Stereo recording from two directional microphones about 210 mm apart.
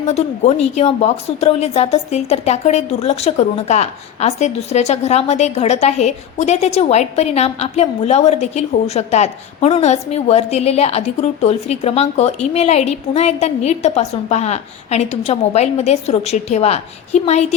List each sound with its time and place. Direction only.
0.0 s a woman's voice: 30° left (ahead or behind)